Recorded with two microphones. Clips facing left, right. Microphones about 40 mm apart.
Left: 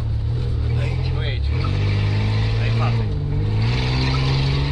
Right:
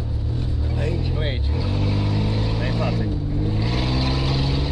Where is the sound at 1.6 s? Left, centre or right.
Left.